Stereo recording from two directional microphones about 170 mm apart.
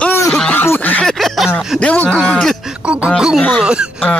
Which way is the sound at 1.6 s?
Centre (ahead or behind).